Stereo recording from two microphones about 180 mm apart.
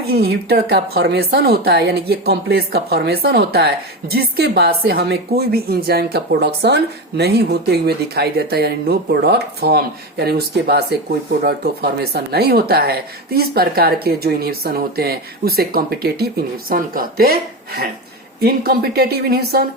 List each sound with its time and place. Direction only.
0.1 s a woman's voice: 60° right (ahead or behind)